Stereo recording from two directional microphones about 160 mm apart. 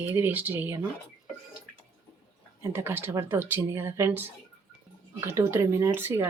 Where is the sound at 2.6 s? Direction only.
15° right (ahead or behind).